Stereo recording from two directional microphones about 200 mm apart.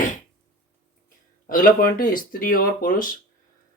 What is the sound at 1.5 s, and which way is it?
Speech, 45° left (ahead or behind).